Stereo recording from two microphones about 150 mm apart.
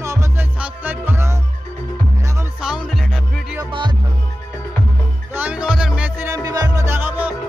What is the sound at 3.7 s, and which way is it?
Music, 35° right (ahead or behind).